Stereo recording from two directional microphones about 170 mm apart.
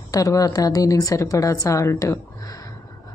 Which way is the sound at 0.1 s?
20° left (ahead or behind).